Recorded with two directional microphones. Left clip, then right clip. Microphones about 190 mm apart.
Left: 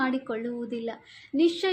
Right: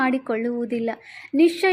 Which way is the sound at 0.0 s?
45° right (ahead or behind).